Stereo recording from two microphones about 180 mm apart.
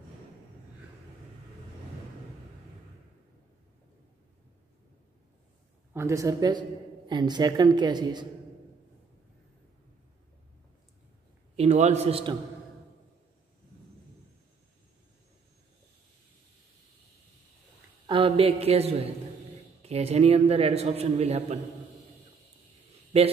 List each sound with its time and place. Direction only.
5.9 s a woman's voice: 15° right (ahead or behind)
11.5 s a man's voice: 35° right (ahead or behind)
18.0 s a man's voice: 30° right (ahead or behind)
23.1 s a man's voice: 35° right (ahead or behind)